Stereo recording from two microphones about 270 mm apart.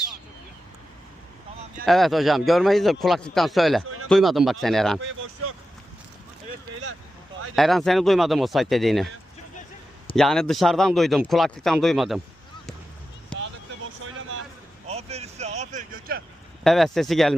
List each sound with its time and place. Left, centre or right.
1.8 s speech: centre
7.5 s speech: centre
10.2 s speech: centre
13.3 s a sound: centre
14.8 s vehicle: right
16.6 s speech: centre